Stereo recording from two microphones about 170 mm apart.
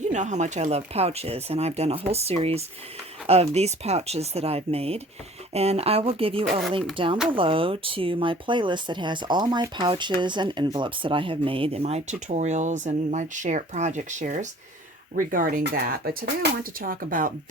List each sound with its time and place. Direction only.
0.1 s speech: 45° right (ahead or behind)
6.5 s speech: centre (ahead or behind)
6.9 s speech: 30° right (ahead or behind); by 17.3 s 55° right (ahead or behind)